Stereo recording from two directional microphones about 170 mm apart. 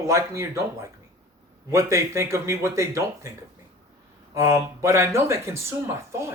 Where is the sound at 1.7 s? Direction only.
15° right (ahead or behind).